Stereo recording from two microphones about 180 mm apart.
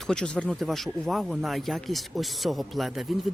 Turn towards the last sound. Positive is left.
turn(degrees=0)  # may be behind; listen again after turning